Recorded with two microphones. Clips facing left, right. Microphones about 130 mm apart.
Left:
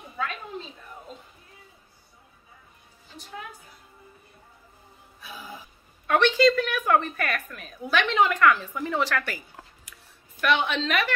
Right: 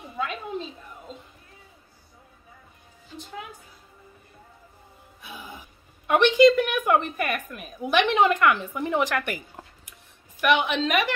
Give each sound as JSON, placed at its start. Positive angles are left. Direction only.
{"t": 5.2, "sound": "music", "side_deg": -20}
{"t": 6.0, "sound": "a woman's voice", "side_deg": -15}